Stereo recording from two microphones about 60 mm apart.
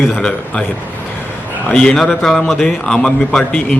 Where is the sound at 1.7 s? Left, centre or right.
Centre.